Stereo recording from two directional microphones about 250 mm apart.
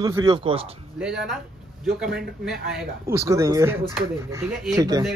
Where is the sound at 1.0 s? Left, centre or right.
Centre.